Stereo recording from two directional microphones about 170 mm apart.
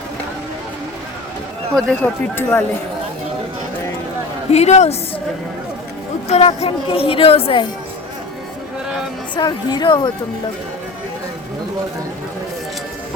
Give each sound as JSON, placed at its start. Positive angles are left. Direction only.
{"t": 1.7, "sound": "speech", "side_deg": 10}
{"t": 4.5, "sound": "a woman's voice", "side_deg": 40}
{"t": 6.2, "sound": "a woman's voice", "side_deg": 40}
{"t": 9.3, "sound": "a woman's voice", "side_deg": 25}